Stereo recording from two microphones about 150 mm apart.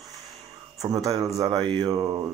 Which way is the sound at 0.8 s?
20° right (ahead or behind).